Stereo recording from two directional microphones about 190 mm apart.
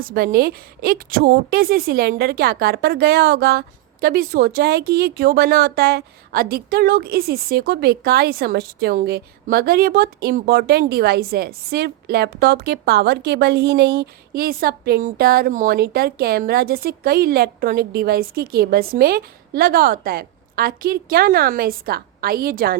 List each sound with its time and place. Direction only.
0.0 s a woman's voice: 50° right (ahead or behind)